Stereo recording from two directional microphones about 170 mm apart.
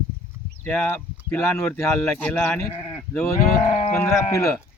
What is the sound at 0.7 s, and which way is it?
Speech, 10° left (ahead or behind).